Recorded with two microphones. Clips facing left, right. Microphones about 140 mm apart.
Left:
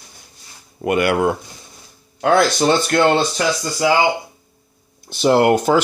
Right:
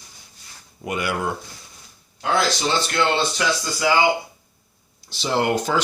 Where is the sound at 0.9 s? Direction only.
65° left (ahead or behind); by 3.9 s 40° left (ahead or behind).